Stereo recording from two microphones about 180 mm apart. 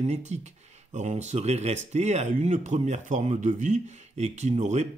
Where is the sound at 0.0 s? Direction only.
40° right (ahead or behind).